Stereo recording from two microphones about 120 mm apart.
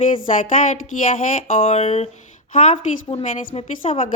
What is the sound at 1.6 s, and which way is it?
Speech, 55° left (ahead or behind).